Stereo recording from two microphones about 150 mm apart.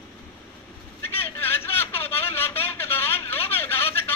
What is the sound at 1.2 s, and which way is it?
A woman's voice, 15° left (ahead or behind).